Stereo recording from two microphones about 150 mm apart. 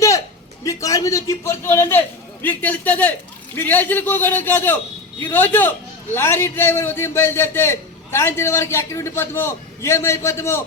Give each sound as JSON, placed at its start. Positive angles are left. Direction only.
{"t": 0.6, "sound": "a man's voice", "side_deg": 20}